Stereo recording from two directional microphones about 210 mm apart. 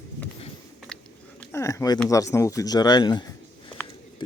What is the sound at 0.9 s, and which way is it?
Biting, 5° left (ahead or behind).